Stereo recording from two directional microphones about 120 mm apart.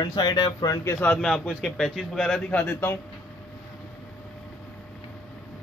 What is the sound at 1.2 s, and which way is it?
A man's voice, 5° left (ahead or behind).